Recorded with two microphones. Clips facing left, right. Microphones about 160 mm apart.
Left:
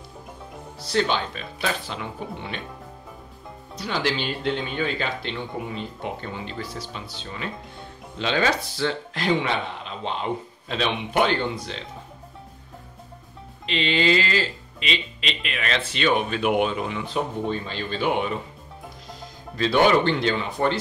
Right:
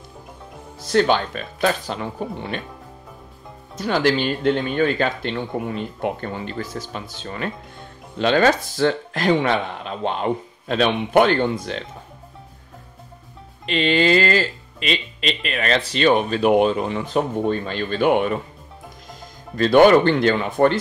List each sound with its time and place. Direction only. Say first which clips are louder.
0.8 s speech: right 6 dB; 50° right (ahead or behind)
3.7 s speech: right 7 dB; 45° right (ahead or behind)
13.7 s speech: right 4 dB; 45° right (ahead or behind)
19.5 s speech: right 6 dB; 50° right (ahead or behind)